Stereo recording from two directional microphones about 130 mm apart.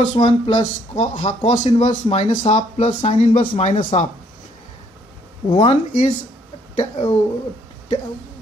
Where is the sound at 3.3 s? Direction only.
55° left (ahead or behind).